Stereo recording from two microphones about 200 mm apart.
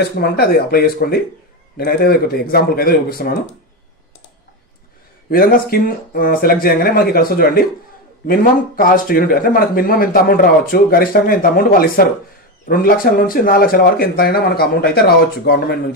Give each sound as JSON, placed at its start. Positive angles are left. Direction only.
{"t": 0.2, "sound": "speech", "side_deg": 50}
{"t": 5.3, "sound": "speech", "side_deg": 50}